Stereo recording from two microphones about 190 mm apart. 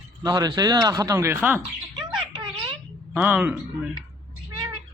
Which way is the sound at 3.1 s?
5° right (ahead or behind).